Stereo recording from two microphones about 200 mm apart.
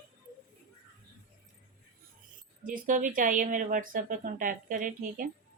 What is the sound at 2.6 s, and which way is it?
A woman's voice, 40° right (ahead or behind).